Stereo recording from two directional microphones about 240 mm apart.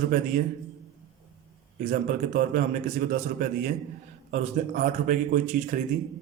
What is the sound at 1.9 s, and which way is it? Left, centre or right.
Speech, right.